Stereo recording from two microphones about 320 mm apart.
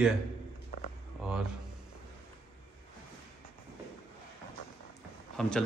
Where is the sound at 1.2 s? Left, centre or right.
Centre.